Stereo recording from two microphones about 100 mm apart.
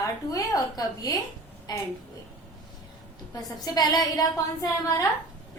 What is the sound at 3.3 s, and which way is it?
A woman's voice, 40° left (ahead or behind).